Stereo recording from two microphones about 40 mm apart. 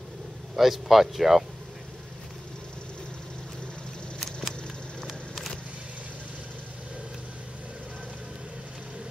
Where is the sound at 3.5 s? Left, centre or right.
Left.